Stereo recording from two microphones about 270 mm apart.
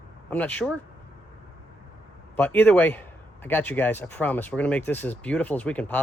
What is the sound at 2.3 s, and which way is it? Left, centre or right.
A man's voice, centre.